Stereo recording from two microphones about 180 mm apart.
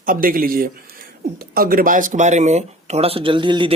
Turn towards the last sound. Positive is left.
turn(degrees=-25)  # may be behind; listen again after turning